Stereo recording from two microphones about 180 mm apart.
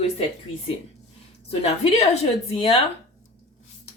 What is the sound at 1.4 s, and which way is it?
Speech, 35° left (ahead or behind).